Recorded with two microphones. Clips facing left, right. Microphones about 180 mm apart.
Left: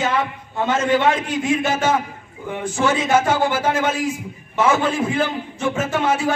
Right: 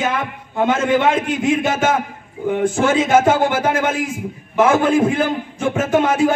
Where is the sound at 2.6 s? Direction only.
50° right (ahead or behind).